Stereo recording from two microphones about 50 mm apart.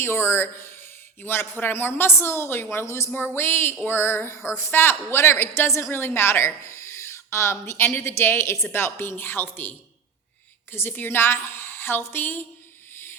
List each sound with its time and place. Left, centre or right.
0.0 s speech: left
2.7 s speech: left
3.2 s a woman's voice: left
5.9 s a woman's voice: left
12.9 s music: left